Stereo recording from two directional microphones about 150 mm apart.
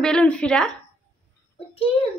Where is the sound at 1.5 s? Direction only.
40° left (ahead or behind).